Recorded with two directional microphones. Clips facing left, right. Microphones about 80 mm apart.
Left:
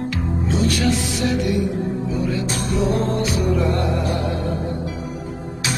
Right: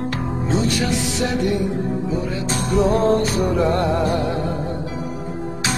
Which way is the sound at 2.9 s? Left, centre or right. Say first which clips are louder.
Right 4 dB; right.